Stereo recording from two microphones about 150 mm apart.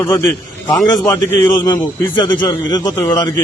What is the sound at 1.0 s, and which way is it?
Speech, 15° left (ahead or behind).